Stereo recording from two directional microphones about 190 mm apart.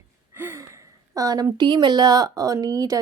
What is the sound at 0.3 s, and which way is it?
Speech, 10° right (ahead or behind).